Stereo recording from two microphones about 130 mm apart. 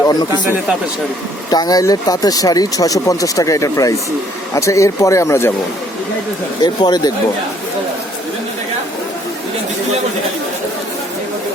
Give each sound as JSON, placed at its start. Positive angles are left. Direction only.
{"t": 1.5, "sound": "speech", "side_deg": 30}
{"t": 6.6, "sound": "speech", "side_deg": 35}